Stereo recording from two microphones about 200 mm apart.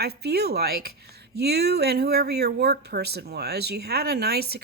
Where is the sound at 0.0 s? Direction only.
55° right (ahead or behind).